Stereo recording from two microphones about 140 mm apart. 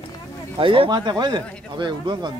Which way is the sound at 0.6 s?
40° right (ahead or behind).